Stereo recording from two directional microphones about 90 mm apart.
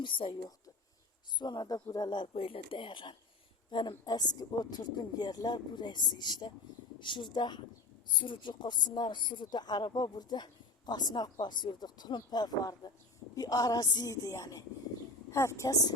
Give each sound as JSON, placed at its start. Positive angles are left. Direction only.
{"t": 0.0, "sound": "a woman's voice", "side_deg": 65}
{"t": 14.3, "sound": "a woman's voice", "side_deg": 35}